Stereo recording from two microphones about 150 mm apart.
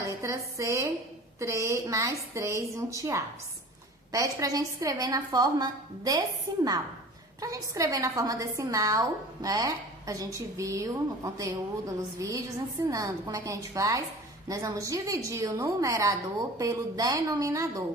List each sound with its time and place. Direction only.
0.0 s a sound: 20° right (ahead or behind)
1.4 s a woman's voice: 20° right (ahead or behind)
12.9 s a woman's voice: 25° right (ahead or behind)